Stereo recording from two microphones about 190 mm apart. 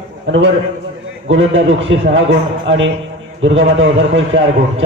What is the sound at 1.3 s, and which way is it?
A man's voice, 85° right.